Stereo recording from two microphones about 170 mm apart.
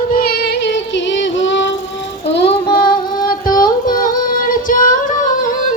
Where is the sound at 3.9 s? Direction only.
55° left (ahead or behind).